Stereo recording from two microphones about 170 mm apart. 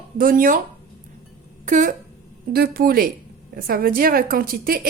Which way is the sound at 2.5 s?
65° right (ahead or behind).